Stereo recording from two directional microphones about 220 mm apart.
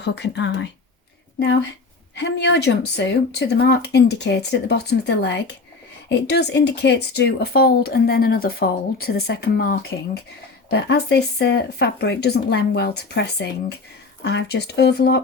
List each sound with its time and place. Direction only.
0.0 s speech: 50° left (ahead or behind)
2.1 s speech: 55° left (ahead or behind)